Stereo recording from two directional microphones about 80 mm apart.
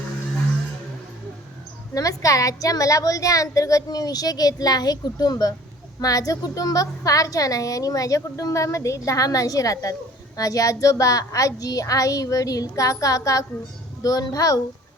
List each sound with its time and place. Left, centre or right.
1.9 s a woman's voice: left